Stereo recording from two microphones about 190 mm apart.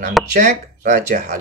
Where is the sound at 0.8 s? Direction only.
40° right (ahead or behind).